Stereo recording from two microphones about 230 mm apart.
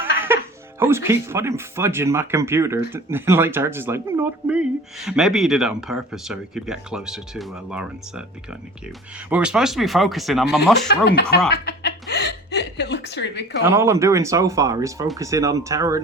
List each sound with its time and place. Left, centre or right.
0.8 s speech: centre
9.3 s speech: centre
11.0 s chuckle: left
12.7 s a woman's voice: left
13.7 s speech: centre